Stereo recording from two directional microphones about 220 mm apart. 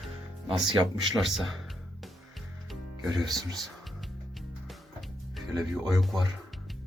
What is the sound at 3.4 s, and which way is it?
Speech, centre (ahead or behind).